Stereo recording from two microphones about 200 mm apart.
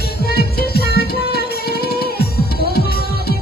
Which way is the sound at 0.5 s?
50° left (ahead or behind).